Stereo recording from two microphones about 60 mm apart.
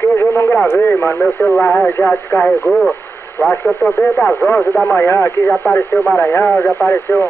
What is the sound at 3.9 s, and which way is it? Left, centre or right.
Speech, left.